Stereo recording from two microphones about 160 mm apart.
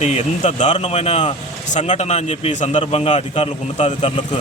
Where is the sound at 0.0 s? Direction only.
45° left (ahead or behind).